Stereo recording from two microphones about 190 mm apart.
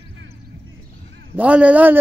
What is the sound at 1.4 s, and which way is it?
Speech, 5° right (ahead or behind).